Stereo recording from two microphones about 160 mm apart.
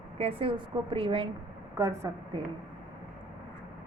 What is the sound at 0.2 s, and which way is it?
A woman's voice, 35° right (ahead or behind).